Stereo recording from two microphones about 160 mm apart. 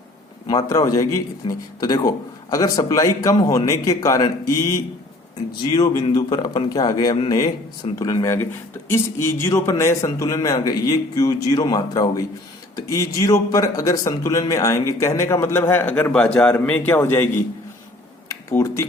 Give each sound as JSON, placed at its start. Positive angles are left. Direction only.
{"t": 0.4, "sound": "a man's voice", "side_deg": 25}
{"t": 5.7, "sound": "a man's voice", "side_deg": 25}
{"t": 18.3, "sound": "a sound", "side_deg": 20}